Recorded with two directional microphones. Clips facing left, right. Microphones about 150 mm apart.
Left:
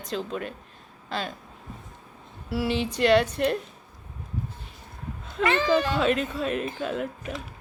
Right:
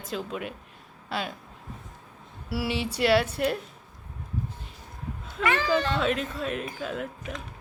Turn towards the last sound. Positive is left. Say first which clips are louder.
# left 3 dB
turn(degrees=0)  # may be behind; listen again after turning